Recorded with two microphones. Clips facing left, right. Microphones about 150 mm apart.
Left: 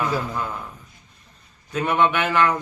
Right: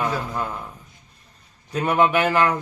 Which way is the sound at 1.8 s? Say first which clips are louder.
Right 2 dB; 40° right (ahead or behind).